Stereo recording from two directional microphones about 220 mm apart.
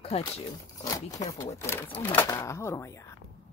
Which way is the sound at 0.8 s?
15° left (ahead or behind).